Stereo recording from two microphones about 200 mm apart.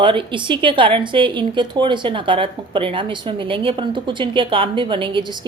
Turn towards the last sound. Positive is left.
turn(degrees=-25)  # may be behind; listen again after turning